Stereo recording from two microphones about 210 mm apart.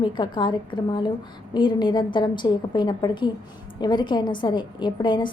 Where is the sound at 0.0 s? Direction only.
20° left (ahead or behind).